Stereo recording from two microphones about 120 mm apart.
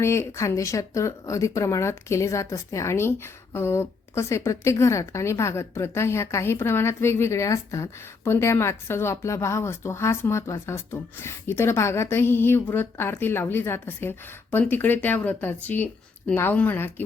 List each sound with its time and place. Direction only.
0.0 s speech: 20° left (ahead or behind)